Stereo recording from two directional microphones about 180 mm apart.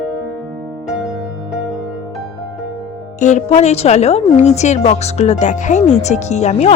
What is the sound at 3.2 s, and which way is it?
A woman's voice, 40° left (ahead or behind).